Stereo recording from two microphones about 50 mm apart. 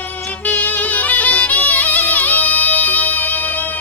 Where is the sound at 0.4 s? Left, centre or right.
Left.